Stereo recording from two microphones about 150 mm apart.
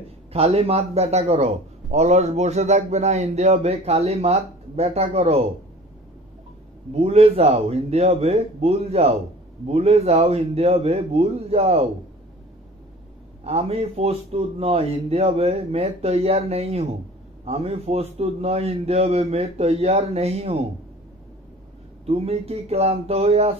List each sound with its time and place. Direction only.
0.3 s a man's voice: 40° right (ahead or behind)
6.9 s a man's voice: 45° right (ahead or behind)
13.4 s a man's voice: 45° right (ahead or behind)
22.0 s a man's voice: 45° right (ahead or behind)